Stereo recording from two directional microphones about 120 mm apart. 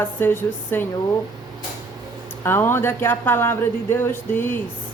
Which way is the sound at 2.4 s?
20° left (ahead or behind).